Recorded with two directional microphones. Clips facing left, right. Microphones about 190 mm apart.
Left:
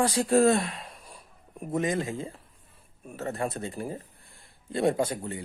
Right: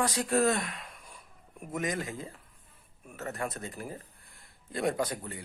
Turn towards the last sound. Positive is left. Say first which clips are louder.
# left 4 dB
turn(degrees=25)  # may be behind; listen again after turning